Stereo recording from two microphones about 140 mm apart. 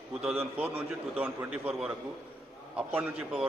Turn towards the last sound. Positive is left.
turn(degrees=-10)  # may be behind; listen again after turning